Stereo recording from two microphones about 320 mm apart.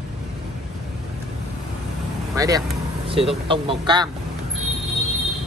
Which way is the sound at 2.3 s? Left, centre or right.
Centre.